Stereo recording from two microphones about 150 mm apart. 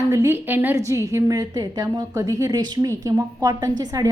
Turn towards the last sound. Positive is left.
turn(degrees=-25)  # may be behind; listen again after turning